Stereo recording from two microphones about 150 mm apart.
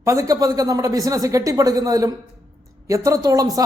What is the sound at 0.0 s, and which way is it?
Speech, 20° right (ahead or behind).